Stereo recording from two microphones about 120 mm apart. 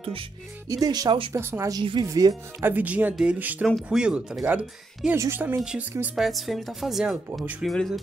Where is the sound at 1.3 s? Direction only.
20° right (ahead or behind).